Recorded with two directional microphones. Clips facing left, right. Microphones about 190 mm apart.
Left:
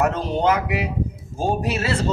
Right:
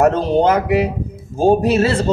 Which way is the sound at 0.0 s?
35° right (ahead or behind).